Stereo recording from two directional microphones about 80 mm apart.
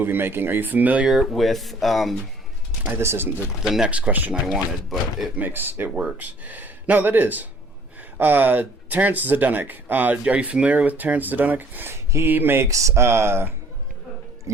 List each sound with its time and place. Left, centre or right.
0.0 s speech: right
1.0 s speech: centre
2.8 s speech: right
3.6 s speech: centre
4.4 s speech: centre
5.4 s speech: right
5.9 s speech: centre
6.4 s speech: right
12.6 s speech: right